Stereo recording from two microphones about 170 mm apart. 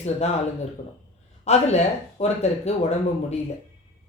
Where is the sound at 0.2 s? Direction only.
40° left (ahead or behind).